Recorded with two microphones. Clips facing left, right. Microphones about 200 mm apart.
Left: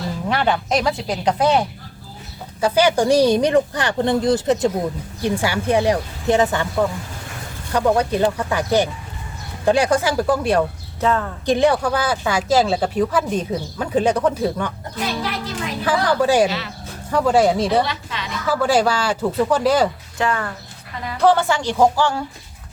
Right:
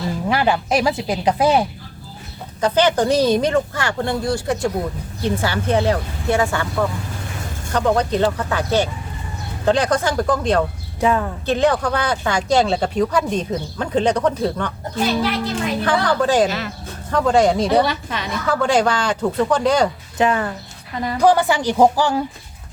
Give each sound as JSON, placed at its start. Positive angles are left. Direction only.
{"t": 0.3, "sound": "speech", "side_deg": -5}
{"t": 2.6, "sound": "speech", "side_deg": 10}
{"t": 7.7, "sound": "speech", "side_deg": 10}
{"t": 11.0, "sound": "speech", "side_deg": -15}
{"t": 11.4, "sound": "speech", "side_deg": 15}
{"t": 15.8, "sound": "speech", "side_deg": 10}
{"t": 16.5, "sound": "speech", "side_deg": -50}
{"t": 17.1, "sound": "speech", "side_deg": 10}
{"t": 17.8, "sound": "a woman's voice", "side_deg": -45}
{"t": 18.4, "sound": "speech", "side_deg": 5}
{"t": 20.1, "sound": "speech", "side_deg": -20}